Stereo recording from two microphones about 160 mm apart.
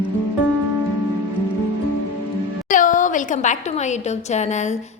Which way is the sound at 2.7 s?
55° left (ahead or behind).